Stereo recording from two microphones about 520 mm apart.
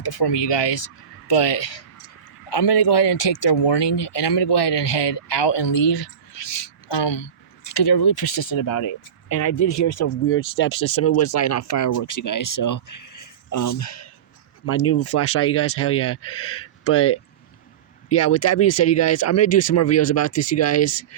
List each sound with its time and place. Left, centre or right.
0.0 s speech: left
18.2 s speech: left